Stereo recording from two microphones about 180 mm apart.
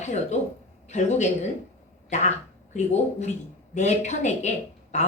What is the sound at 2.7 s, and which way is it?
Speech, 40° left (ahead or behind).